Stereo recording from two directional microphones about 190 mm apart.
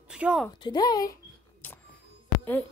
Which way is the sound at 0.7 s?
20° left (ahead or behind).